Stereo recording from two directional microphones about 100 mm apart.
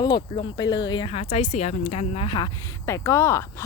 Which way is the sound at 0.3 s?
55° left (ahead or behind).